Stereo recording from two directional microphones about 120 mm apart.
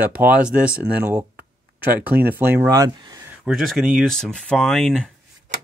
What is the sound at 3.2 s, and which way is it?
Speech, 10° right (ahead or behind).